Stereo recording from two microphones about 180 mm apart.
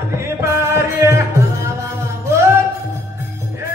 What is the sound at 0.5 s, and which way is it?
Music, 15° right (ahead or behind).